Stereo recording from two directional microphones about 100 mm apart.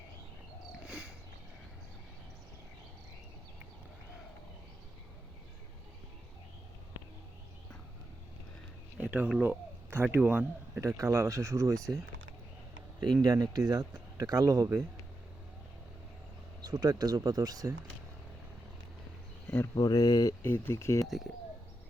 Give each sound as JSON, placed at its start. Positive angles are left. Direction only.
{"t": 0.7, "sound": "a sound", "side_deg": -10}
{"t": 9.0, "sound": "speech", "side_deg": -15}
{"t": 10.8, "sound": "speech", "side_deg": -30}
{"t": 13.2, "sound": "speech", "side_deg": -40}
{"t": 16.6, "sound": "speech", "side_deg": -40}
{"t": 19.7, "sound": "speech", "side_deg": 40}
{"t": 20.4, "sound": "speech", "side_deg": 25}
{"t": 21.0, "sound": "speech", "side_deg": 0}